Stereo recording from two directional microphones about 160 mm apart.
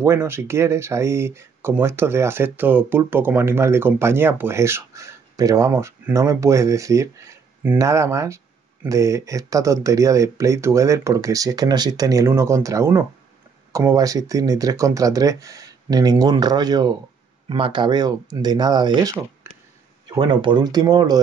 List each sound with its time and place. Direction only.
0.0 s speech: 15° right (ahead or behind)
19.4 s a sound: 15° right (ahead or behind)
20.2 s speech: 30° right (ahead or behind)